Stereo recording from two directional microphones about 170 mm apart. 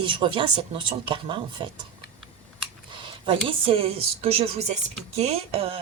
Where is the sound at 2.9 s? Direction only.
30° right (ahead or behind).